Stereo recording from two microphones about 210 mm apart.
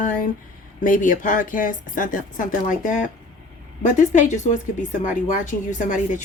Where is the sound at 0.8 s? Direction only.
40° left (ahead or behind).